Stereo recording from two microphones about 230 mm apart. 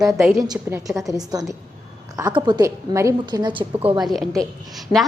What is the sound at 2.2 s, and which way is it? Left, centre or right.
A woman's voice, centre.